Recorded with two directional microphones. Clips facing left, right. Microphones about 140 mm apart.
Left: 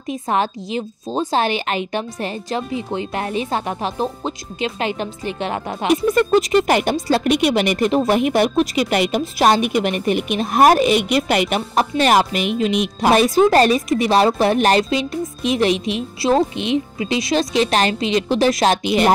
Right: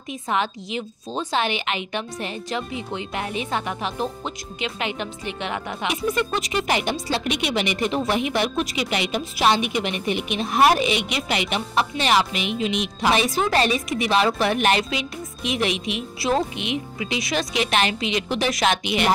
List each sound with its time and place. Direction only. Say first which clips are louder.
0.1 s a woman's voice: left 5 dB; 40° left (ahead or behind)